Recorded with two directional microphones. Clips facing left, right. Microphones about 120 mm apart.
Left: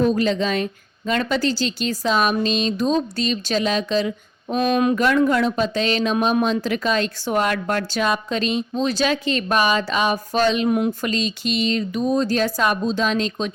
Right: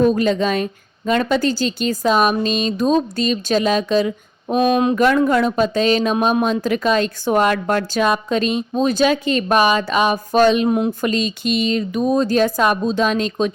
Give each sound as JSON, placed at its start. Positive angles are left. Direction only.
{"t": 0.0, "sound": "a woman's voice", "side_deg": -45}
{"t": 4.4, "sound": "a sound", "side_deg": -25}
{"t": 4.9, "sound": "a woman's voice", "side_deg": -40}
{"t": 7.9, "sound": "a woman's voice", "side_deg": -45}
{"t": 10.7, "sound": "a sound", "side_deg": -25}
{"t": 11.1, "sound": "a woman's voice", "side_deg": -50}